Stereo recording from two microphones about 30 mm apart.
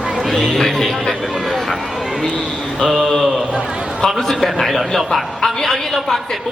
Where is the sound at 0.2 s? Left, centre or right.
Centre.